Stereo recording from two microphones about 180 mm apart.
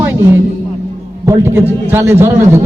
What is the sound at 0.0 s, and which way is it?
Music, 15° right (ahead or behind).